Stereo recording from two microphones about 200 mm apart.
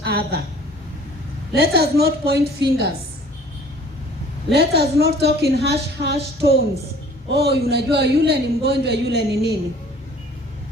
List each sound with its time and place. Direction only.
0.0 s a woman's voice: 55° right (ahead or behind)
1.5 s a woman's voice: 50° right (ahead or behind)
4.5 s a woman's voice: 55° right (ahead or behind)